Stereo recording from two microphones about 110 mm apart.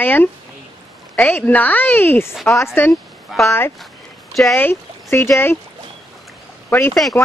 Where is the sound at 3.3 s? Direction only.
5° right (ahead or behind).